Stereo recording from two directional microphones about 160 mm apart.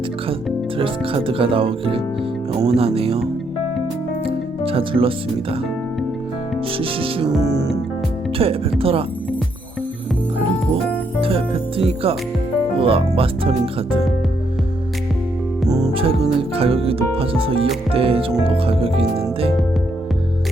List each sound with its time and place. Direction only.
0.8 s speech: 35° right (ahead or behind)
4.3 s speech: 35° right (ahead or behind)
6.7 s speech: 35° right (ahead or behind)
7.4 s music: 25° right (ahead or behind)
8.4 s speech: 35° right (ahead or behind)
11.2 s music: 35° right (ahead or behind)
12.7 s speech: 35° right (ahead or behind)
15.9 s music: 35° right (ahead or behind)
16.6 s speech: 35° right (ahead or behind)